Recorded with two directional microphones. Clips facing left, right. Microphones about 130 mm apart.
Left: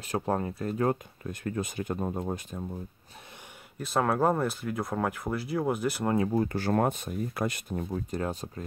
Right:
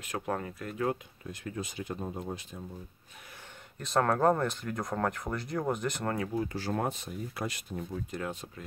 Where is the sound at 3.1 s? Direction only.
30° left (ahead or behind).